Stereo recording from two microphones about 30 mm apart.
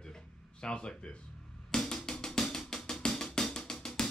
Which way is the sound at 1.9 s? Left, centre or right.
Centre.